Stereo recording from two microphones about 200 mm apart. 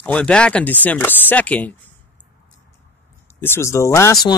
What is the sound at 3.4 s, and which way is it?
Speech, 10° left (ahead or behind).